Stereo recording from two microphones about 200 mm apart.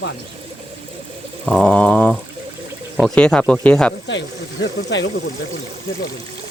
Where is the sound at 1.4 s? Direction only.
5° left (ahead or behind).